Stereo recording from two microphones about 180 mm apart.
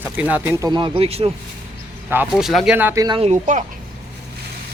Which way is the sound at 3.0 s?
25° right (ahead or behind).